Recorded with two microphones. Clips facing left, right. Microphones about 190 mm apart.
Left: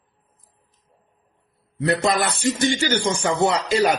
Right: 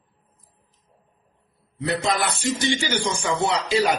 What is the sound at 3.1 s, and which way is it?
Speech, 45° left (ahead or behind).